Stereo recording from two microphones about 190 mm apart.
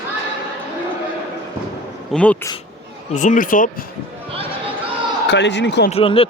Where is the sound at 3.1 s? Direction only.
40° left (ahead or behind).